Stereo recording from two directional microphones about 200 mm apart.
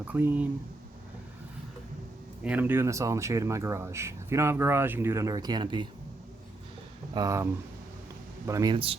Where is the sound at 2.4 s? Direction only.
10° right (ahead or behind).